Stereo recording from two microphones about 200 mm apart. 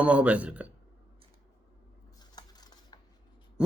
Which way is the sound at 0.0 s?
5° right (ahead or behind).